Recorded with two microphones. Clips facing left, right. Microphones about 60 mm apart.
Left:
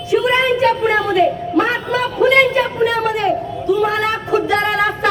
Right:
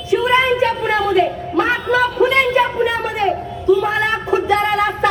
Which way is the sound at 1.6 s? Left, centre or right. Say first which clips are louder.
Right 2 dB; right.